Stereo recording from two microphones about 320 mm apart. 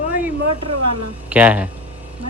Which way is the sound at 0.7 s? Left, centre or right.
Right.